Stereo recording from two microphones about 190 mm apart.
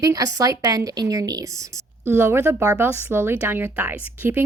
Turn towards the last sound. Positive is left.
turn(degrees=-10)  # may be behind; listen again after turning